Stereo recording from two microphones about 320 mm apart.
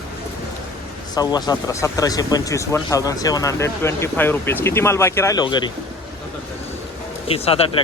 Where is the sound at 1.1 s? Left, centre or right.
Centre.